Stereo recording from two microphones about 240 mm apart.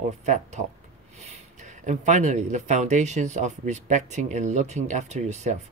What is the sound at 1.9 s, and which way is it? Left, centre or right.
Speech, right.